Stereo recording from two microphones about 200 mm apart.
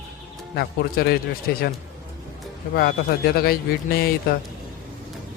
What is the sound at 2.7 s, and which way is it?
Speech, 50° left (ahead or behind).